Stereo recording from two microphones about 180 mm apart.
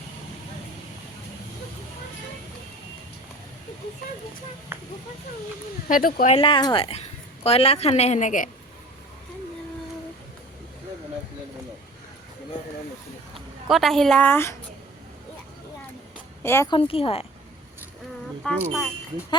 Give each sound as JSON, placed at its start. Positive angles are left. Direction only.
{"t": 4.7, "sound": "speech", "side_deg": -10}
{"t": 5.9, "sound": "speech", "side_deg": 55}
{"t": 6.3, "sound": "a woman's voice", "side_deg": 30}
{"t": 13.7, "sound": "a woman's voice", "side_deg": 0}
{"t": 16.4, "sound": "speech", "side_deg": 15}
{"t": 16.7, "sound": "a woman's voice", "side_deg": 30}
{"t": 18.4, "sound": "a woman's voice", "side_deg": 0}